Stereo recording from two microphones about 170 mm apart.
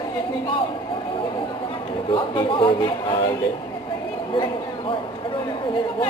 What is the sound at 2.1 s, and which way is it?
A man's voice, 30° left (ahead or behind).